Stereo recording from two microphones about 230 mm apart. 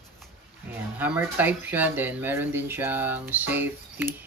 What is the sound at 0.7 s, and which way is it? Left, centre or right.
Speech, centre.